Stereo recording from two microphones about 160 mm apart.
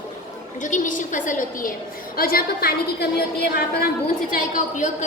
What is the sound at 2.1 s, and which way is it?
Speech, 65° left (ahead or behind).